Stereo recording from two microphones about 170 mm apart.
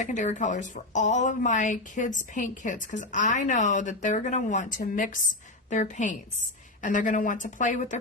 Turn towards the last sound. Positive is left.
turn(degrees=45)  # may be behind; listen again after turning